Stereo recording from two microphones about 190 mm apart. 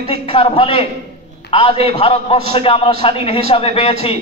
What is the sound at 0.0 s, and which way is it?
Speech, 30° left (ahead or behind).